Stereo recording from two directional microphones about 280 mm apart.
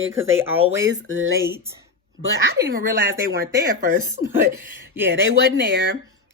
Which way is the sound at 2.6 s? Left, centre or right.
Right.